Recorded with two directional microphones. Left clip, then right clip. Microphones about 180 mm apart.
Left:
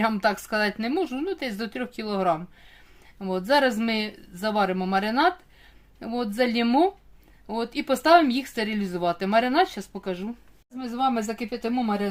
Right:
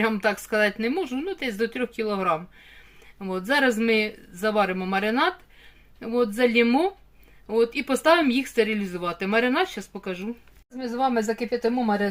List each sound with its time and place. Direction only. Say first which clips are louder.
0.0 s speech: even; 30° left (ahead or behind)